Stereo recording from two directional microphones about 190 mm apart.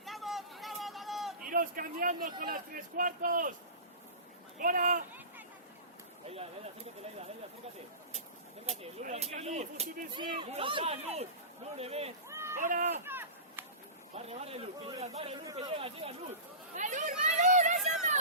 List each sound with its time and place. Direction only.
0.0 s vehicle: centre (ahead or behind)
1.5 s a man's voice: 45° right (ahead or behind)
4.6 s a man's voice: 45° right (ahead or behind)
8.6 s speech: 35° right (ahead or behind)
12.3 s a sound: 15° right (ahead or behind)
12.6 s speech: 40° right (ahead or behind)
13.1 s chop: 10° right (ahead or behind)
14.2 s speech: 35° right (ahead or behind)
16.7 s chatter: 40° right (ahead or behind)